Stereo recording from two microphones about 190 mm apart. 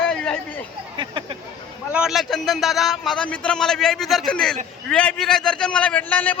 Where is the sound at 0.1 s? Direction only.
5° left (ahead or behind).